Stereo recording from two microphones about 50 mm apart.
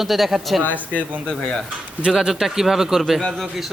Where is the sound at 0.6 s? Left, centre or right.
Left.